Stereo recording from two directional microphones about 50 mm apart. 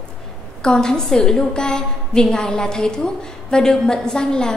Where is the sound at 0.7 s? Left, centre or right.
Centre.